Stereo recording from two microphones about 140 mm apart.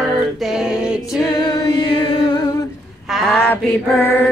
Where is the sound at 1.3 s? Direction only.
30° left (ahead or behind).